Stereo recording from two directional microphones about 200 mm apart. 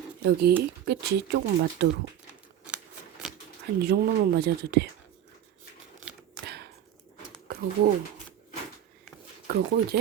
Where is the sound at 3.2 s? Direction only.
Centre (ahead or behind).